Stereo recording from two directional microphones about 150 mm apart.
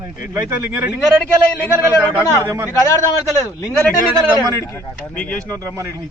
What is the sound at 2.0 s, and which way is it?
Speech, 10° right (ahead or behind).